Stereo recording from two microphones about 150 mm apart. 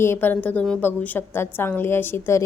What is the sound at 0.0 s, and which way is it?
A woman's voice, 15° left (ahead or behind).